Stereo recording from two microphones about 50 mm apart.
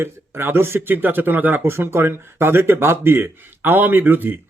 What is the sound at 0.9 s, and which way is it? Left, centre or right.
Speech, right.